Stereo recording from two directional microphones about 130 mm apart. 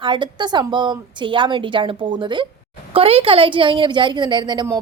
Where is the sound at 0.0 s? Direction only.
35° right (ahead or behind).